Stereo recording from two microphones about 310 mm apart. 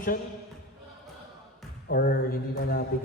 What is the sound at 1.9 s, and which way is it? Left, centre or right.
Speech, left.